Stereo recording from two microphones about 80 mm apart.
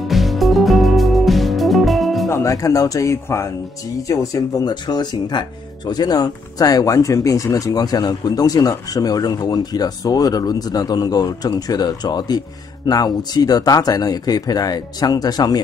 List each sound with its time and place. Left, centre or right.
0.1 s music: centre
2.2 s speech: left
4.6 s speech: left